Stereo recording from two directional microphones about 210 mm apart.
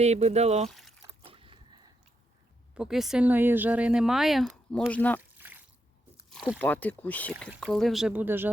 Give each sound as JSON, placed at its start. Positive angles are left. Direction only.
{"t": 0.0, "sound": "speech", "side_deg": -30}
{"t": 0.7, "sound": "liquid", "side_deg": 0}
{"t": 1.2, "sound": "a sound", "side_deg": -25}
{"t": 2.7, "sound": "speech", "side_deg": -5}
{"t": 5.4, "sound": "a sound", "side_deg": -10}
{"t": 6.3, "sound": "speech", "side_deg": 5}